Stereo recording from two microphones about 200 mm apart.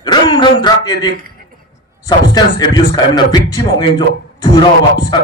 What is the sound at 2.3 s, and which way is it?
A man's voice, 20° left (ahead or behind).